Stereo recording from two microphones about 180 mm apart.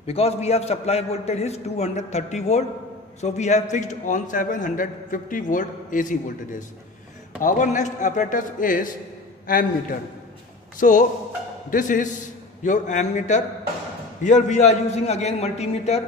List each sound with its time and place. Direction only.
0.0 s a man's voice: 35° left (ahead or behind)
7.4 s a man's voice: 45° left (ahead or behind)
10.8 s a man's voice: 45° left (ahead or behind)